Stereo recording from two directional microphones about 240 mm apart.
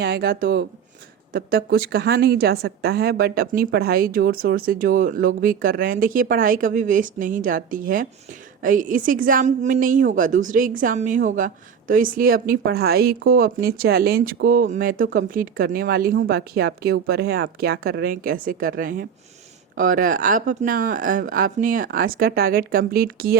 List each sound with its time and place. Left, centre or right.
0.0 s a woman's voice: right